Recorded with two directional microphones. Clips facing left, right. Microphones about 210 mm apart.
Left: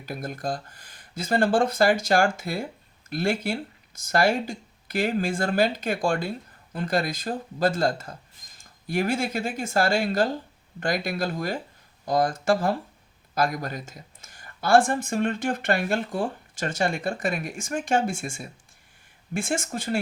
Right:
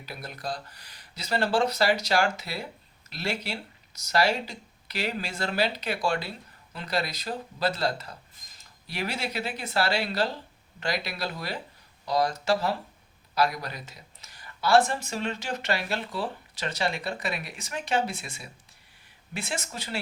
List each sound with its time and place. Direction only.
0.0 s speech: 50° left (ahead or behind)